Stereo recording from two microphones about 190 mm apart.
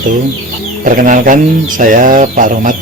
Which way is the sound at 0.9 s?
45° right (ahead or behind).